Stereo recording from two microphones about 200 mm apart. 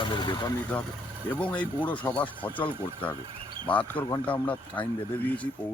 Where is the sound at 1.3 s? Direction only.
5° left (ahead or behind).